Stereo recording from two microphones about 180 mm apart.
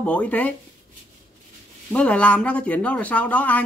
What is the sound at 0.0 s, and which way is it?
Speech, 5° left (ahead or behind).